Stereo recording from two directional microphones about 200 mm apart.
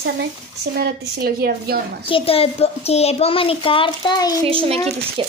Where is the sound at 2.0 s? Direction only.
25° left (ahead or behind).